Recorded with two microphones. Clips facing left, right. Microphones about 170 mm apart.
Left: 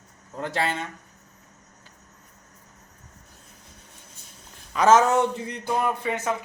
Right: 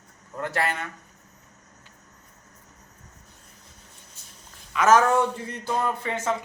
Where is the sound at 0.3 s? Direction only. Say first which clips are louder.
Even; 25° left (ahead or behind).